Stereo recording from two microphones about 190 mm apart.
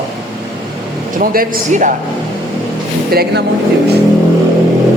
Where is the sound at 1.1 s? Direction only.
50° right (ahead or behind).